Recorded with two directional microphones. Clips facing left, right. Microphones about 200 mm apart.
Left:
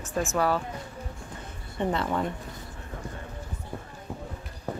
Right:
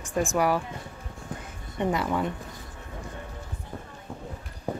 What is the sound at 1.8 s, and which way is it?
Speech, 10° right (ahead or behind).